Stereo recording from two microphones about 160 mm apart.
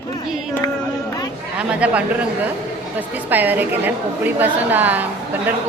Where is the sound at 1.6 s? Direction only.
5° right (ahead or behind).